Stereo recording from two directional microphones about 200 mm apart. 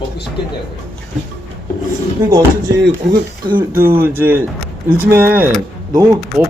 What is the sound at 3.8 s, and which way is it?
Speech, 50° right (ahead or behind).